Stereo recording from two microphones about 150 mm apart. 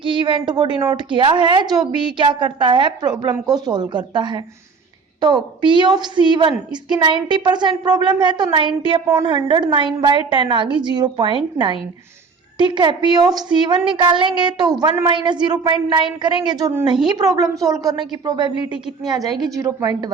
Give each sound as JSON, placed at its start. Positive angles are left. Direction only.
{"t": 0.0, "sound": "a woman's voice", "side_deg": -35}